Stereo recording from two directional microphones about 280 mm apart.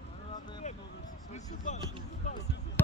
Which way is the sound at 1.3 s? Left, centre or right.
Left.